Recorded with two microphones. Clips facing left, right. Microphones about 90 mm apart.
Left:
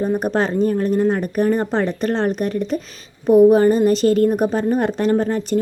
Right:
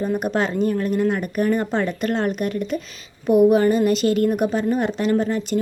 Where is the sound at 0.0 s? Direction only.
40° left (ahead or behind).